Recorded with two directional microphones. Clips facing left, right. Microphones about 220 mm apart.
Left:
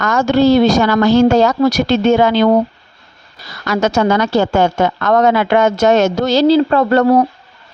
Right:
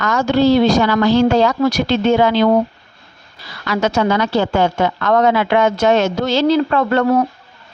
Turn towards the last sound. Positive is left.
turn(degrees=35)  # may be behind; listen again after turning